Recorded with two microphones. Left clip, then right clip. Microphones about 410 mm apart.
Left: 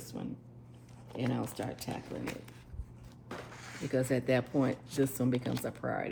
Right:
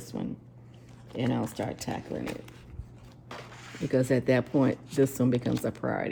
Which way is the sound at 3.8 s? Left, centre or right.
Right.